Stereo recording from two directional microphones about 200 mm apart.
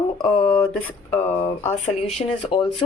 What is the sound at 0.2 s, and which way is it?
A woman's voice, 15° left (ahead or behind).